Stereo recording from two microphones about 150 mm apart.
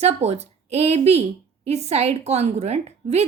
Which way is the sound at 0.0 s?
45° right (ahead or behind).